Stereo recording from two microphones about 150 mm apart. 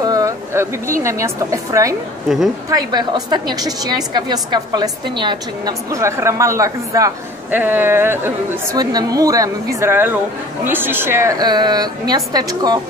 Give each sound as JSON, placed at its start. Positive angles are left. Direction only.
{"t": 0.0, "sound": "a sound", "side_deg": -25}
{"t": 1.0, "sound": "a woman's voice", "side_deg": -20}
{"t": 8.7, "sound": "a woman's voice", "side_deg": -25}